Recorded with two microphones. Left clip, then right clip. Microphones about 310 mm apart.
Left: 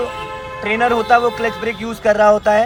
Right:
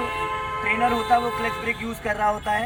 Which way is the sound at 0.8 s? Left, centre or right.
Left.